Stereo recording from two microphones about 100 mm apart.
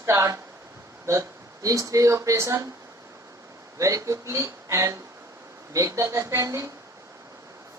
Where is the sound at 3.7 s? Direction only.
35° right (ahead or behind).